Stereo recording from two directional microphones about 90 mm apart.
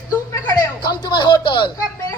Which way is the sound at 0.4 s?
55° left (ahead or behind).